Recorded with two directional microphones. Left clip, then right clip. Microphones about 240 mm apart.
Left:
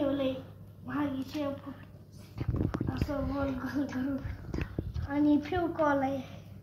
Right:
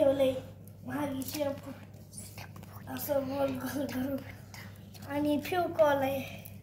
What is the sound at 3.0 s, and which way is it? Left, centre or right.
Speech, right.